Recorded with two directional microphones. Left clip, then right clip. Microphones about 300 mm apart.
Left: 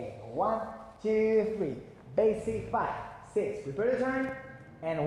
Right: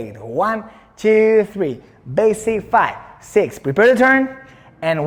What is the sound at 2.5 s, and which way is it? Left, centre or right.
Speech, right.